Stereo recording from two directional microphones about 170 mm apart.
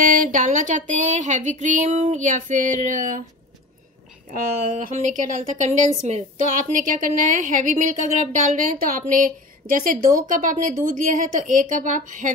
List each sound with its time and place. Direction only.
0.0 s a woman's voice: 55° right (ahead or behind)
4.3 s a woman's voice: 50° right (ahead or behind)